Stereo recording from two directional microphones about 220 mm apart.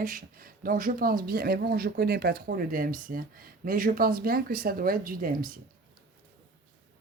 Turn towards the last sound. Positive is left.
turn(degrees=-40)  # may be behind; listen again after turning